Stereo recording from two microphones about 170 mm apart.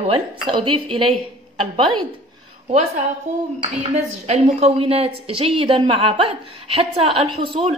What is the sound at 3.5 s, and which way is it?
A woman's voice, 40° right (ahead or behind).